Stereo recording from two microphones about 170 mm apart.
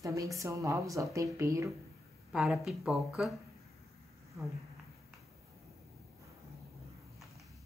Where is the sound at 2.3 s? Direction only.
5° right (ahead or behind).